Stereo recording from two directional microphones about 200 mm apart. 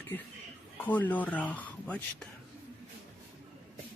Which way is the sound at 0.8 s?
10° left (ahead or behind).